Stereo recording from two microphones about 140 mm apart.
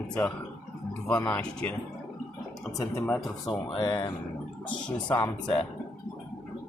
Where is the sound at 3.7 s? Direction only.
30° left (ahead or behind).